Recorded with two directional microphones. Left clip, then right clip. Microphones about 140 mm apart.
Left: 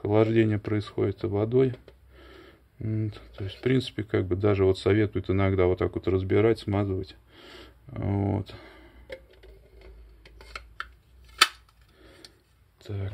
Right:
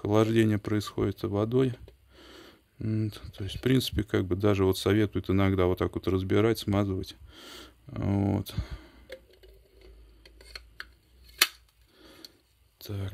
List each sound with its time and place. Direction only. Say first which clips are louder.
0.0 s speech: left 2 dB; 30° right (ahead or behind)
12.7 s speech: left 1 dB; 30° right (ahead or behind)